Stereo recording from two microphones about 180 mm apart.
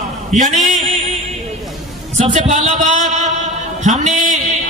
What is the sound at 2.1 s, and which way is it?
A man's voice, 40° right (ahead or behind).